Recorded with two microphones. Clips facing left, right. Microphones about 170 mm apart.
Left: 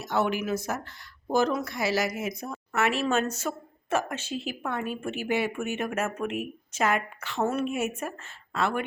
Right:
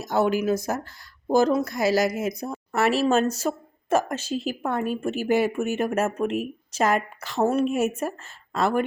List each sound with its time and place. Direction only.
0.0 s speech: 40° right (ahead or behind)